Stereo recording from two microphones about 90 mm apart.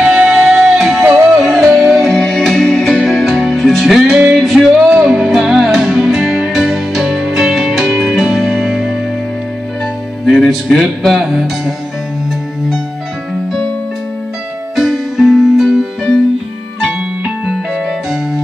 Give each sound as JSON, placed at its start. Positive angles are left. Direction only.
{"t": 0.0, "sound": "music", "side_deg": -5}
{"t": 4.8, "sound": "music", "side_deg": -10}
{"t": 10.2, "sound": "music", "side_deg": -5}
{"t": 14.8, "sound": "music", "side_deg": 0}